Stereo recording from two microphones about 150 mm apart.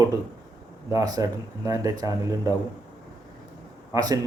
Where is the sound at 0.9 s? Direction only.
25° right (ahead or behind).